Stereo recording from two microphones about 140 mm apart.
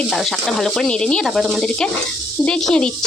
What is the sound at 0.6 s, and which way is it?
Speech, 5° left (ahead or behind).